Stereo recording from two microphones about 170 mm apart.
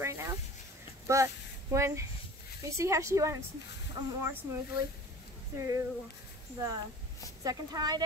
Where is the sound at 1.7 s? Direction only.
15° right (ahead or behind).